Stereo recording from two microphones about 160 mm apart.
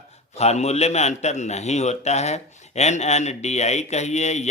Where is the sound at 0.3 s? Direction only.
45° left (ahead or behind).